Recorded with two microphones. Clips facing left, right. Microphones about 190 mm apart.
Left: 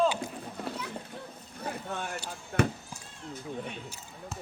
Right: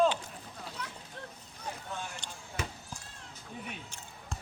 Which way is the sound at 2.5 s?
60° left (ahead or behind).